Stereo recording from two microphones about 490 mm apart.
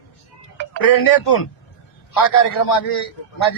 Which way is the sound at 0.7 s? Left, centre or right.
Left.